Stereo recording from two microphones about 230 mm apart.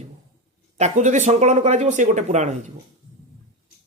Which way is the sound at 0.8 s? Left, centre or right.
Right.